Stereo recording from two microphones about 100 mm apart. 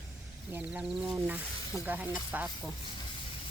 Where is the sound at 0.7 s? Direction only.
10° right (ahead or behind).